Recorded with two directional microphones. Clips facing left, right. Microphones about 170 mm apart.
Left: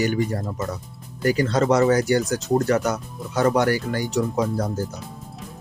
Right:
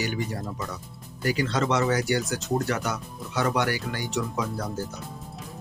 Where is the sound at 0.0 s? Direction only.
45° left (ahead or behind).